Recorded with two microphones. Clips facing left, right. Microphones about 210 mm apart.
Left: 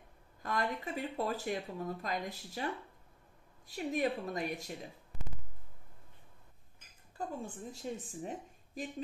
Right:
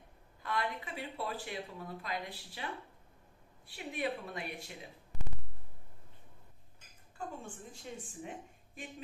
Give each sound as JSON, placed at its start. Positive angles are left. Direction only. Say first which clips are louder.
{"t": 0.4, "sound": "a woman's voice", "louder": "left 2 dB", "side_deg": 45}
{"t": 7.2, "sound": "a woman's voice", "louder": "left 3 dB", "side_deg": 40}